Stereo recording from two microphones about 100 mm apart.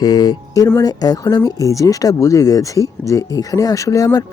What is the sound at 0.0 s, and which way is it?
Speech, 40° left (ahead or behind).